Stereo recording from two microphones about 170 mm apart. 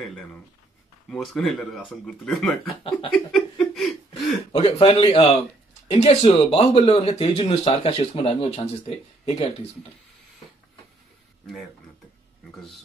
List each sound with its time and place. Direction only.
1.1 s speech: centre (ahead or behind)
3.1 s chuckle: 5° left (ahead or behind)
4.5 s speech: 30° left (ahead or behind)